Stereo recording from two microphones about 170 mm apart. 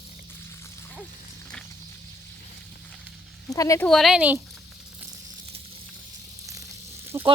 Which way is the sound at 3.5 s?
20° left (ahead or behind).